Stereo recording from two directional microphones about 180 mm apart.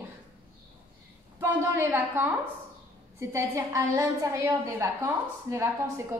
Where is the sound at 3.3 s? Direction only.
15° right (ahead or behind).